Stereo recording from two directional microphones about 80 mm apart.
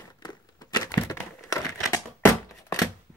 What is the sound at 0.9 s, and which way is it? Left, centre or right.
Crumpling, left.